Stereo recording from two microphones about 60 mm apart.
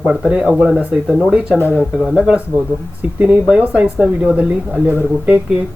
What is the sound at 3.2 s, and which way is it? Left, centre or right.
Speech, right.